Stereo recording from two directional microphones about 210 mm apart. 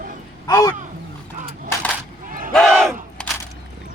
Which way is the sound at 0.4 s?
15° left (ahead or behind).